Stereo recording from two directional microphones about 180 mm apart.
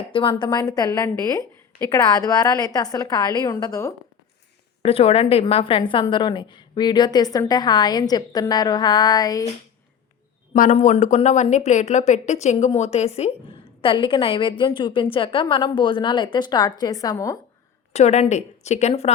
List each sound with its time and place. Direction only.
0.1 s a woman's voice: 30° left (ahead or behind)
4.8 s a woman's voice: 35° left (ahead or behind)
10.5 s a woman's voice: 45° left (ahead or behind); by 17.4 s 20° left (ahead or behind)
17.9 s speech: 40° left (ahead or behind)